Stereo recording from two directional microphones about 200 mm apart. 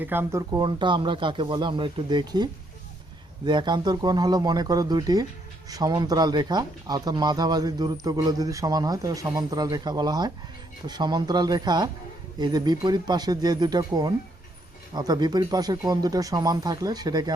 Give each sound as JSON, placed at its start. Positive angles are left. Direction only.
{"t": 0.0, "sound": "speech", "side_deg": -10}